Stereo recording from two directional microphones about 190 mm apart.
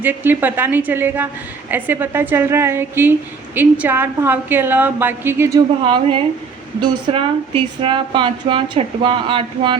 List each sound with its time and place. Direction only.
0.0 s a woman's voice: 10° right (ahead or behind)
5.8 s a woman's voice: 30° right (ahead or behind)